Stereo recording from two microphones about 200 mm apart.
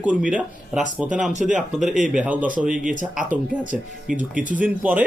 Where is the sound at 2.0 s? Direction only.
5° right (ahead or behind).